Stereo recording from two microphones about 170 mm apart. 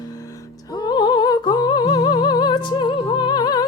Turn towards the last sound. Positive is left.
turn(degrees=25)  # may be behind; listen again after turning